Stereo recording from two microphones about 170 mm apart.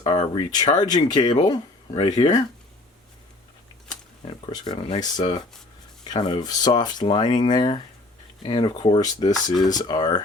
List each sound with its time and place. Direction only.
0.0 s speech: 25° left (ahead or behind)
3.8 s speech: 25° left (ahead or behind)